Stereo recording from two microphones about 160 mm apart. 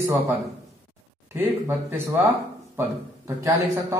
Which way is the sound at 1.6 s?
15° right (ahead or behind).